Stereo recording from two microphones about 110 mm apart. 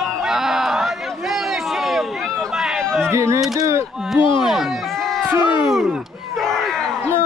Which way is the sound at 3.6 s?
25° right (ahead or behind).